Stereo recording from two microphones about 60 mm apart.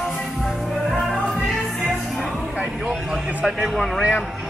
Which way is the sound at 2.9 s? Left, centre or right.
Centre.